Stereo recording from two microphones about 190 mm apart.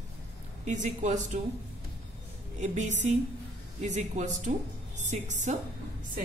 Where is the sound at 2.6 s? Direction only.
40° right (ahead or behind).